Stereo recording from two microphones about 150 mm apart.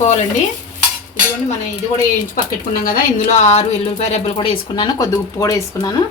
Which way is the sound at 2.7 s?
70° left (ahead or behind).